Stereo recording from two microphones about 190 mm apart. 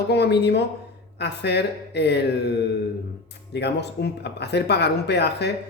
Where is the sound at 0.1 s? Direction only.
60° left (ahead or behind).